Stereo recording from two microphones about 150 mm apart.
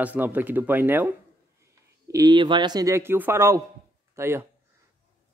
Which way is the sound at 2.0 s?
25° right (ahead or behind).